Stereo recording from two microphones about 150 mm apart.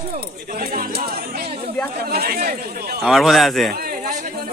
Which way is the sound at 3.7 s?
80° right.